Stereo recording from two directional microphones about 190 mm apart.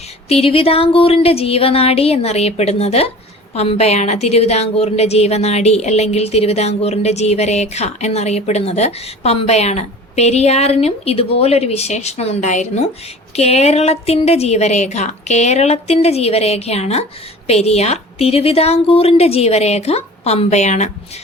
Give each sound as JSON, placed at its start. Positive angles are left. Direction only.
{"t": 0.3, "sound": "a woman's voice", "side_deg": 30}